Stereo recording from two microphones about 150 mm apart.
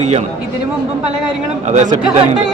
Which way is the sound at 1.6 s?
55° right (ahead or behind).